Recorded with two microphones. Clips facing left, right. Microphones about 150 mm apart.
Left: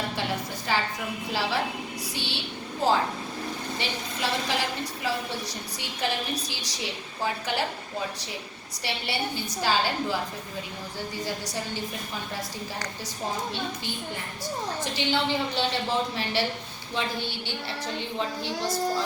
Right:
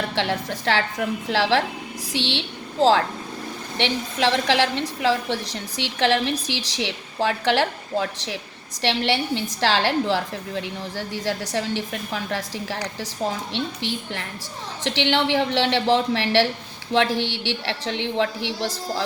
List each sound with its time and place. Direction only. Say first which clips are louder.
0.2 s a woman's voice: right 6 dB; 90° right
3.8 s a woman's voice: right 11 dB; 90° right